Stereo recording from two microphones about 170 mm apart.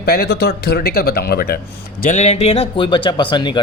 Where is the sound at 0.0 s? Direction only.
65° left (ahead or behind).